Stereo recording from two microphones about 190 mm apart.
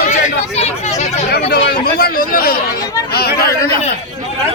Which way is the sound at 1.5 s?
55° left (ahead or behind).